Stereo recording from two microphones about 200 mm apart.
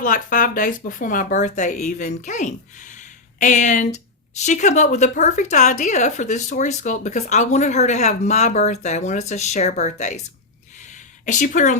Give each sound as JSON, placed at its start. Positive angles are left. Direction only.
{"t": 0.0, "sound": "speech", "side_deg": 40}
{"t": 11.3, "sound": "speech", "side_deg": 40}